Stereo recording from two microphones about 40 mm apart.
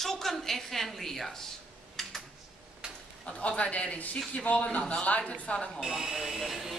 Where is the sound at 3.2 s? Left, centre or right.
Left.